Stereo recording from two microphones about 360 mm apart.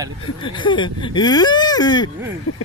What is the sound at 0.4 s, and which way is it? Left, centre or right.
Speech, centre.